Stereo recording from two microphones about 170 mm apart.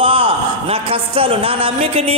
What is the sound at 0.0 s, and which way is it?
A man's voice, 30° right (ahead or behind).